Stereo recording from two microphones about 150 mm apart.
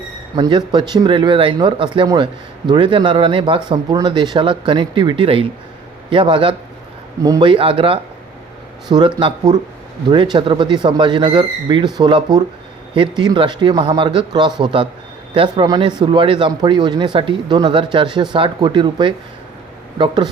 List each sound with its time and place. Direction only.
0.3 s speech: 30° right (ahead or behind)